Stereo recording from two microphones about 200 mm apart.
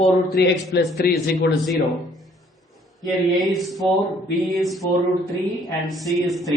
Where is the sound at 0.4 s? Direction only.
50° left (ahead or behind).